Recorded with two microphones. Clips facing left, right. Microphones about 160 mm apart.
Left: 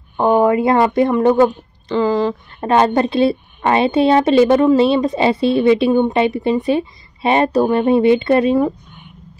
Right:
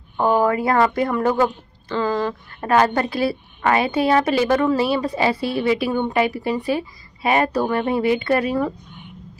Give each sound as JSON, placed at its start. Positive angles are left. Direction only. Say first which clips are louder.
{"t": 0.2, "sound": "speech", "louder": "left 5 dB", "side_deg": 20}